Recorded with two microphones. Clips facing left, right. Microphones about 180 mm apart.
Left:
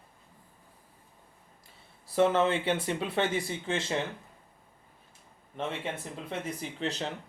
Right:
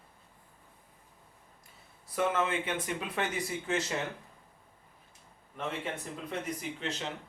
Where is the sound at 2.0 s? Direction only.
30° left (ahead or behind).